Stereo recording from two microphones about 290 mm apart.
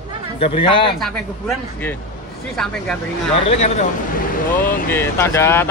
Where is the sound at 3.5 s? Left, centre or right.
Left.